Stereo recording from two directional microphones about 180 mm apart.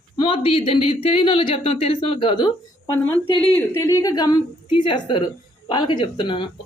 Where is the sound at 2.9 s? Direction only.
10° left (ahead or behind); by 6.5 s 25° left (ahead or behind).